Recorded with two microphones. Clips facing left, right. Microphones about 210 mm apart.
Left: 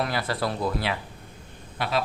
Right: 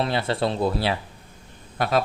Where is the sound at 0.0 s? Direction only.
25° right (ahead or behind).